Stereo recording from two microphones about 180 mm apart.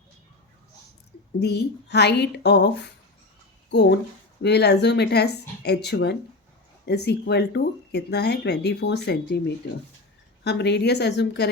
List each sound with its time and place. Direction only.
1.4 s speech: 70° left (ahead or behind)
10.4 s speech: 70° left (ahead or behind)